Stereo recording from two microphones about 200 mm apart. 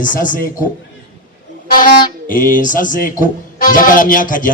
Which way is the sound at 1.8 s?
45° left (ahead or behind).